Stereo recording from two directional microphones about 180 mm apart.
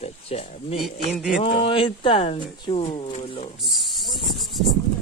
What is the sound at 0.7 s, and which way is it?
Speech, centre (ahead or behind).